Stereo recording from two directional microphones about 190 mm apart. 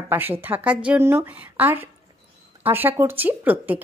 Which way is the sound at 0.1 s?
10° right (ahead or behind).